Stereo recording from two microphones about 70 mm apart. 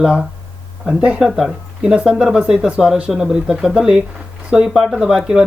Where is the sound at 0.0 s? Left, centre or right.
Centre.